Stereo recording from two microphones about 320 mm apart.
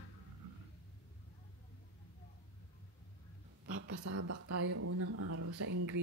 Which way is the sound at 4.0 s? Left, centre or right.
Right.